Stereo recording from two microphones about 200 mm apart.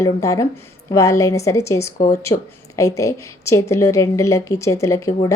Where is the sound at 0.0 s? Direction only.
15° left (ahead or behind).